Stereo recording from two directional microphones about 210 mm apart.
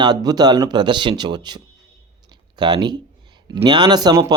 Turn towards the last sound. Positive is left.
turn(degrees=-20)  # may be behind; listen again after turning